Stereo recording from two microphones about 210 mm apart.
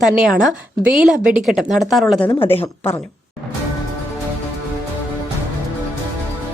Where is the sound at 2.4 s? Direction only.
25° left (ahead or behind).